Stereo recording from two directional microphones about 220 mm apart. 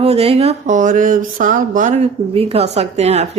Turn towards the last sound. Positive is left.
turn(degrees=-30)  # may be behind; listen again after turning